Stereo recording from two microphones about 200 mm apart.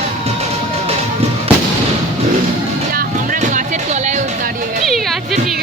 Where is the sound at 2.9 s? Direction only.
45° right (ahead or behind).